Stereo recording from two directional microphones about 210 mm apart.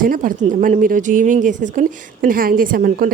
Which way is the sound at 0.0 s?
40° right (ahead or behind).